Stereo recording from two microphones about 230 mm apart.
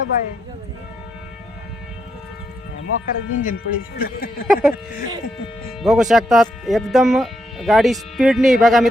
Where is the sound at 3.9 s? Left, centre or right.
Left.